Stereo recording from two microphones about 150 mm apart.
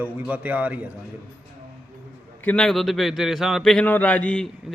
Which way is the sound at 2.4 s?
5° left (ahead or behind).